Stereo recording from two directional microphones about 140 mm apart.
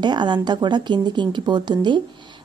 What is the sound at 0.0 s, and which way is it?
A woman's voice, 30° right (ahead or behind).